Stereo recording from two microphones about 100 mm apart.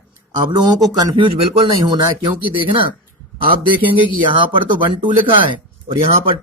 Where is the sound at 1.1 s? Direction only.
55° right (ahead or behind).